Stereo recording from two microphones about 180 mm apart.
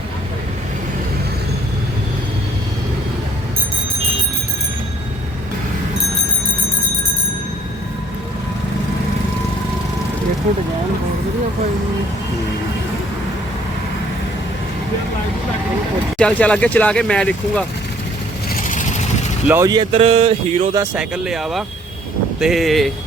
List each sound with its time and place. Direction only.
16.1 s speech: 5° left (ahead or behind)
19.5 s speech: 15° right (ahead or behind); by 20.7 s 35° right (ahead or behind)
20.9 s speech: 5° right (ahead or behind)